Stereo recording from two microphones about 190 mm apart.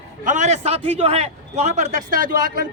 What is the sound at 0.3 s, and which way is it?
A man's voice, 40° right (ahead or behind).